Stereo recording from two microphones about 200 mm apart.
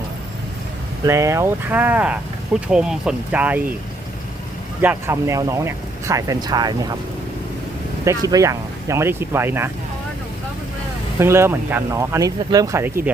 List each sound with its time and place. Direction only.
1.0 s speech: 15° right (ahead or behind)
4.8 s speech: 10° right (ahead or behind)
8.0 s speech: 15° right (ahead or behind)
11.2 s speech: 10° right (ahead or behind)